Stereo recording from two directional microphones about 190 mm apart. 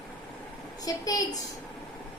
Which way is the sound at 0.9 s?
20° left (ahead or behind).